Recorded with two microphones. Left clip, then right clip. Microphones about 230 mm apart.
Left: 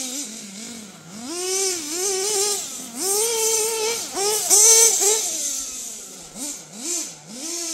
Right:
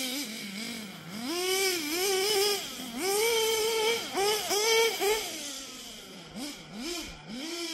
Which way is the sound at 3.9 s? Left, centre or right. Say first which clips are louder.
Left 4 dB; left.